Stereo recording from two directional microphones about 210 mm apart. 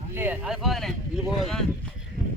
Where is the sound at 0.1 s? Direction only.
10° right (ahead or behind).